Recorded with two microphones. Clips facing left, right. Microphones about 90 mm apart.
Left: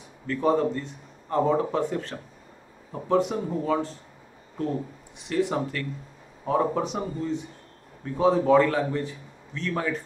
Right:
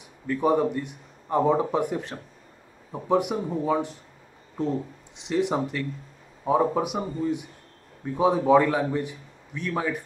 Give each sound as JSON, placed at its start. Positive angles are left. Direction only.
{"t": 0.3, "sound": "a man's voice", "side_deg": -15}